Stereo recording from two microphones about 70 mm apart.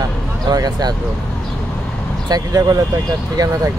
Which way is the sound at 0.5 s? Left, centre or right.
Right.